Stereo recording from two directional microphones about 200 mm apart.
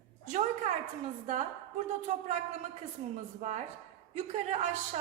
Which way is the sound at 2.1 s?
35° right (ahead or behind).